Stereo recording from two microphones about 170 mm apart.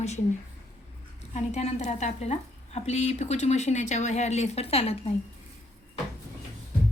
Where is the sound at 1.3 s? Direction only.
40° left (ahead or behind).